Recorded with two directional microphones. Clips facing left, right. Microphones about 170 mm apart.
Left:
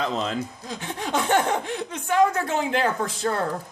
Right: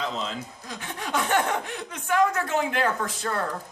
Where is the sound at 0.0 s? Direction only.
60° left (ahead or behind).